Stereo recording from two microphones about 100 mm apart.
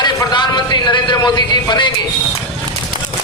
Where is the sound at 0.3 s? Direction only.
45° left (ahead or behind).